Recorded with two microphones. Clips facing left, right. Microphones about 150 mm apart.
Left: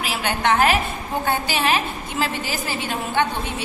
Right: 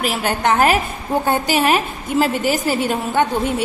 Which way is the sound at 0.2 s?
40° right (ahead or behind).